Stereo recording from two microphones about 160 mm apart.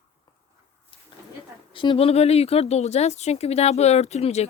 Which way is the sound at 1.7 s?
30° left (ahead or behind).